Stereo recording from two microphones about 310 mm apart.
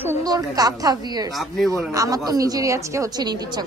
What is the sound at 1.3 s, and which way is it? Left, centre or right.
A woman's voice, centre.